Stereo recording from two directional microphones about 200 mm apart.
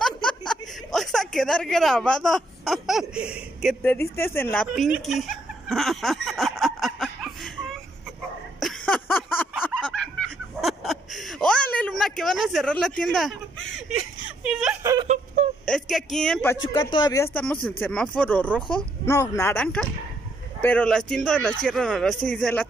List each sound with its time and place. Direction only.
0.0 s a sound: 5° left (ahead or behind)
3.8 s speech: 10° left (ahead or behind)
4.7 s a sound: centre (ahead or behind)
9.8 s snicker: 5° left (ahead or behind)
14.4 s speech: 5° right (ahead or behind)
14.8 s speech: 15° right (ahead or behind)
15.0 s a sound: 35° right (ahead or behind)
15.6 s speech: centre (ahead or behind)
16.6 s speech: 20° left (ahead or behind)